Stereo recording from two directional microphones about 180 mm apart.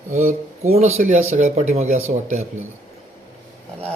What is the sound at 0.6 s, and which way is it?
Speech, 35° right (ahead or behind).